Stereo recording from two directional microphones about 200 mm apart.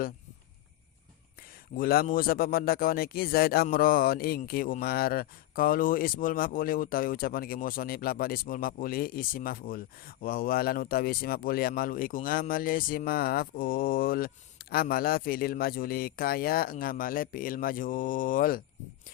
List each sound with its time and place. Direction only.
1.7 s a man's voice: 45° left (ahead or behind)